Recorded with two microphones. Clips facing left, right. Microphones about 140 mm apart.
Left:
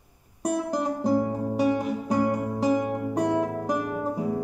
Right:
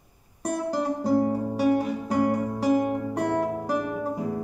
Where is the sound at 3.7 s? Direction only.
Centre (ahead or behind).